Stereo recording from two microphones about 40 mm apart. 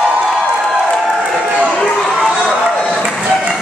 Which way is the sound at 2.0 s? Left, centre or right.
Centre.